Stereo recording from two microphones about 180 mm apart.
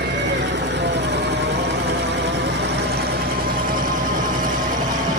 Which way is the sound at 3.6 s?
50° right (ahead or behind).